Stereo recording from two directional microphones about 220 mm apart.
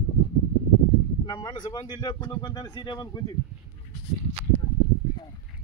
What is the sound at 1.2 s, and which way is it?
Speech, 20° left (ahead or behind).